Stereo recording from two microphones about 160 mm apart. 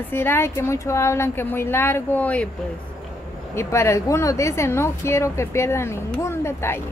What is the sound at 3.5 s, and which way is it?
Speech, 15° left (ahead or behind).